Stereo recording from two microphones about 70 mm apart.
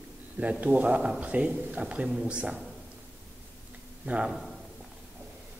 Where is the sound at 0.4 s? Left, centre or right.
Right.